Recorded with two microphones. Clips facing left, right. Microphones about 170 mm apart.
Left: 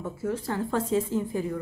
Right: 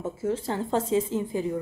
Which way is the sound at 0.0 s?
25° right (ahead or behind).